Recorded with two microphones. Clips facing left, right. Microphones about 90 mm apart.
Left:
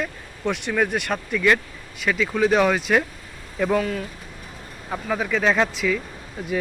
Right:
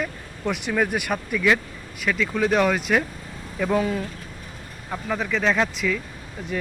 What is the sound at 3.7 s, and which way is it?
Speech, 20° right (ahead or behind).